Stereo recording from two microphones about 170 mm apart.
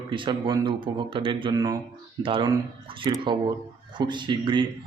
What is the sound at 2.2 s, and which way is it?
Speech, 30° right (ahead or behind).